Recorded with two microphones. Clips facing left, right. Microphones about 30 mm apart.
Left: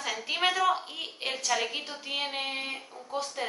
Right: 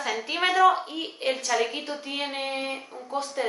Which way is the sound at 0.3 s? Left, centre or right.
Centre.